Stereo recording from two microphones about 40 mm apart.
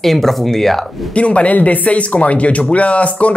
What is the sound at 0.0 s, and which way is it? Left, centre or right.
Speech, centre.